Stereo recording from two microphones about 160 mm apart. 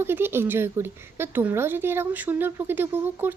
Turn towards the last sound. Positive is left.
turn(degrees=-15)  # may be behind; listen again after turning